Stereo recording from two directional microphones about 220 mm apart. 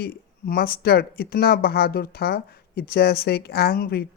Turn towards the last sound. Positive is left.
turn(degrees=45)  # may be behind; listen again after turning